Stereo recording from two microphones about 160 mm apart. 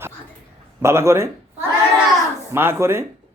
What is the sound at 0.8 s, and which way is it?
Speech, 15° right (ahead or behind).